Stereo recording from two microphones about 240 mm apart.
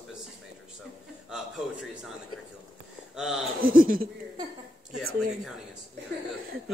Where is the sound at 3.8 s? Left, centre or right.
Right.